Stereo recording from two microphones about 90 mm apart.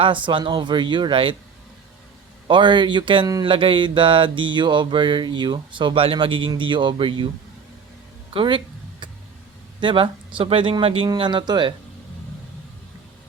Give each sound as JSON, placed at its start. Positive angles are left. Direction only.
{"t": 0.0, "sound": "mantra", "side_deg": -65}
{"t": 2.5, "sound": "mantra", "side_deg": -60}
{"t": 8.3, "sound": "a sound", "side_deg": -75}
{"t": 9.8, "sound": "speech", "side_deg": -70}
{"t": 11.2, "sound": "mantra", "side_deg": -60}